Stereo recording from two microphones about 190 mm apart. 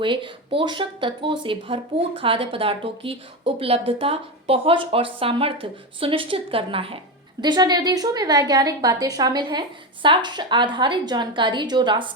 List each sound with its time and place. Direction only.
0.0 s speech: 25° right (ahead or behind)